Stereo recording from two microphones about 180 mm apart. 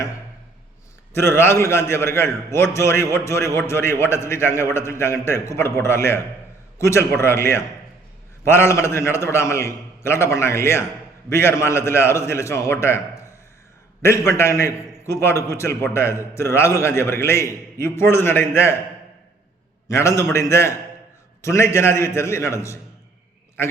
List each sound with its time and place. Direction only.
1.1 s a man's voice: 15° left (ahead or behind)
19.9 s a man's voice: 15° left (ahead or behind)